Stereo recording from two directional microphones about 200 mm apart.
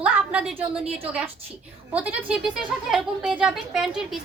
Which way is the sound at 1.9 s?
5° right (ahead or behind).